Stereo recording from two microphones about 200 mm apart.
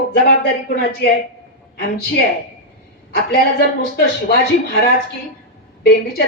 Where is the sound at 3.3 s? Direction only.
50° left (ahead or behind).